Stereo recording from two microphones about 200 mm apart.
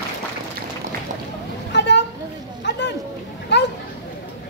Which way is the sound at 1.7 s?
60° left (ahead or behind).